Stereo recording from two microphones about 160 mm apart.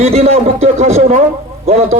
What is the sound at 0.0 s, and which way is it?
A man's voice, 40° right (ahead or behind).